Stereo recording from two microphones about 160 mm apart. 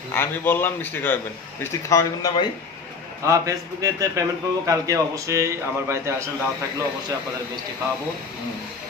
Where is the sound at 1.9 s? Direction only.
20° left (ahead or behind).